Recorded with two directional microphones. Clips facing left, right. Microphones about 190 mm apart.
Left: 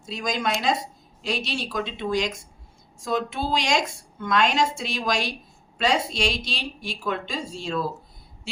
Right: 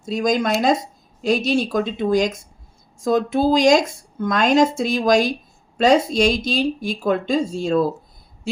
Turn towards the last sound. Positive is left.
turn(degrees=-45)  # may be behind; listen again after turning